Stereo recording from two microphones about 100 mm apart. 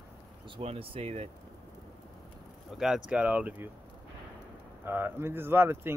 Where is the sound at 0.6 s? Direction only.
80° right.